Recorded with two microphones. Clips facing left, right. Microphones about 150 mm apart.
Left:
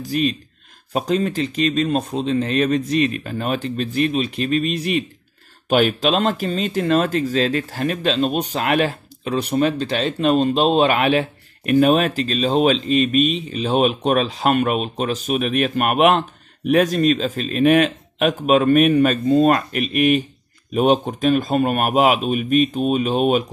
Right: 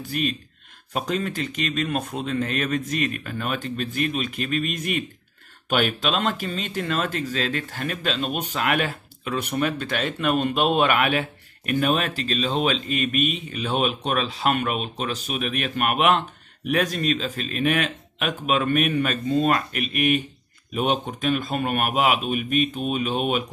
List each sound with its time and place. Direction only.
0.0 s speech: 40° left (ahead or behind)
5.7 s speech: 40° left (ahead or behind)